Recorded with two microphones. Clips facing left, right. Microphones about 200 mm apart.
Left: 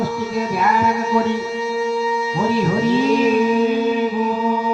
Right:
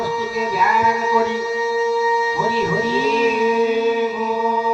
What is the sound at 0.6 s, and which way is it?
Music, 55° left (ahead or behind).